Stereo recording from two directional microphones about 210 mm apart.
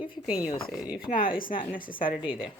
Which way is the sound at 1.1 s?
40° left (ahead or behind).